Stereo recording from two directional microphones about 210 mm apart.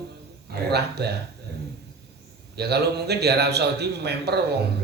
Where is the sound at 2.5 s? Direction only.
50° right (ahead or behind).